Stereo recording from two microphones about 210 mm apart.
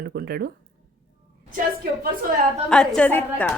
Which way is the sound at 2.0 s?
45° right (ahead or behind).